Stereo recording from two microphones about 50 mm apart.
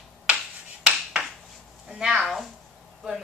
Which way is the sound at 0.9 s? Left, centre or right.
Centre.